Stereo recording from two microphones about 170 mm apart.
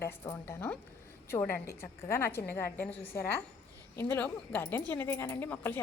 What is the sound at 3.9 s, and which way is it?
Speech, 10° left (ahead or behind).